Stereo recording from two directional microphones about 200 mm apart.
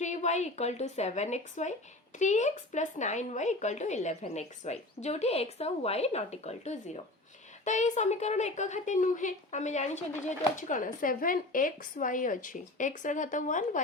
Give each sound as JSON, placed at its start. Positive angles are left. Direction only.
{"t": 0.0, "sound": "a woman's voice", "side_deg": 35}